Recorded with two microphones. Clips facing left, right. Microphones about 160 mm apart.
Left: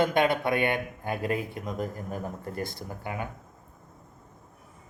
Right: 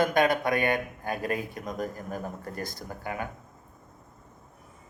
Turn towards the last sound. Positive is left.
turn(degrees=20)  # may be behind; listen again after turning